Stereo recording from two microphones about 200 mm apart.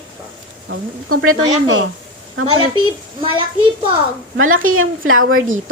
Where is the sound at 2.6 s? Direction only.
25° right (ahead or behind).